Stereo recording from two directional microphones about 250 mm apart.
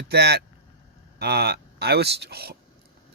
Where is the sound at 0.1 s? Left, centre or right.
Right.